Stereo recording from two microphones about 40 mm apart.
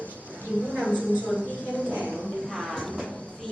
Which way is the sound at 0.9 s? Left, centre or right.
Left.